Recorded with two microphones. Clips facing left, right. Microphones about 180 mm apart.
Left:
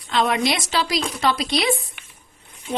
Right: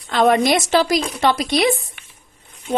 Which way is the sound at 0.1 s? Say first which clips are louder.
Right 6 dB; 45° right (ahead or behind).